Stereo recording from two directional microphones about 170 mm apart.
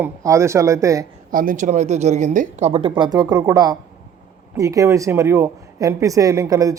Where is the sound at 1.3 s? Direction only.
55° right (ahead or behind).